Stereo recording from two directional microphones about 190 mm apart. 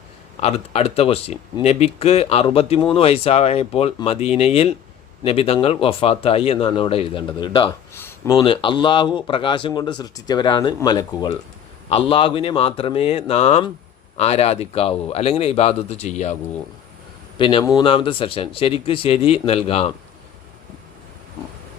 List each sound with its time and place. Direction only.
0.4 s speech: 30° left (ahead or behind)
7.9 s speech: 15° left (ahead or behind); by 16.4 s 35° left (ahead or behind)
17.3 s speech: 25° left (ahead or behind)